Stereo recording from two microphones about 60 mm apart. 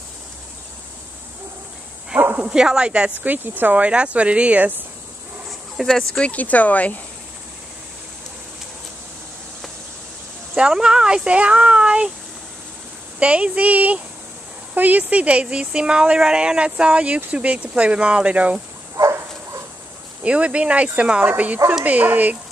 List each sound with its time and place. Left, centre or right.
2.1 s speech: right
2.5 s speech: centre
3.2 s speech: right
5.5 s dog: centre
6.1 s speech: left
10.5 s speech: centre
13.2 s speech: right
20.2 s speech: centre